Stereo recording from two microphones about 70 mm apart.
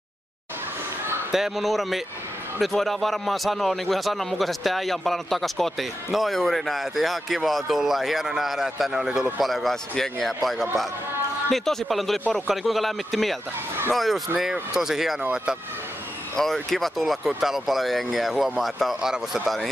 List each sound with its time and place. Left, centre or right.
1.3 s a man's voice: centre
16.3 s a man's voice: centre